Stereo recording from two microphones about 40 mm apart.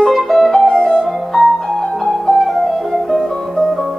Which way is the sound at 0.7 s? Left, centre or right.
Left.